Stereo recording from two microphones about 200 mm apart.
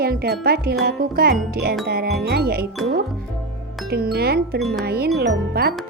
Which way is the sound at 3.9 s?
50° right (ahead or behind).